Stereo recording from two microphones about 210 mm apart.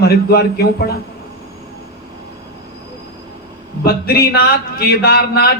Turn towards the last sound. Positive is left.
turn(degrees=50)  # may be behind; listen again after turning